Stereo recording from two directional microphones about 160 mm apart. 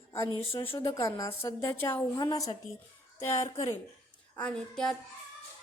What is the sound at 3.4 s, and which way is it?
Speech, 40° left (ahead or behind).